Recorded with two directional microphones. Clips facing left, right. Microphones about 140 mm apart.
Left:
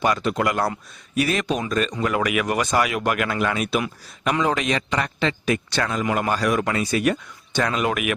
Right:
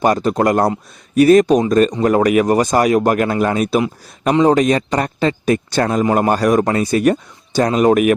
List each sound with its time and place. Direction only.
0.0 s a man's voice: 40° right (ahead or behind)